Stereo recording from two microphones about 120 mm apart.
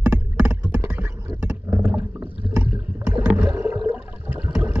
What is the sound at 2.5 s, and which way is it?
Boat, 15° right (ahead or behind).